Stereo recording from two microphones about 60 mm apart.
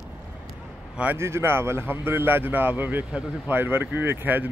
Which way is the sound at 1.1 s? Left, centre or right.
Right.